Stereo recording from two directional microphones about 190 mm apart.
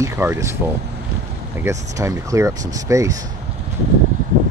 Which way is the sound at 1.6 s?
15° right (ahead or behind).